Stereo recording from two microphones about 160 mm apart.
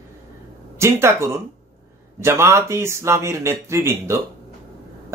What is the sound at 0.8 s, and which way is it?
Speech, 15° right (ahead or behind).